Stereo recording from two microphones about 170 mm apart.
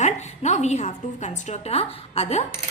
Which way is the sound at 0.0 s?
40° left (ahead or behind).